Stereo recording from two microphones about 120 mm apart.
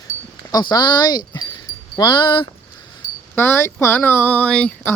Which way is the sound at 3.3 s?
20° left (ahead or behind).